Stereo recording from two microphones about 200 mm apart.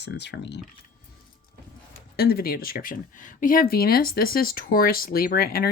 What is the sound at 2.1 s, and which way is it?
Speech, 50° left (ahead or behind).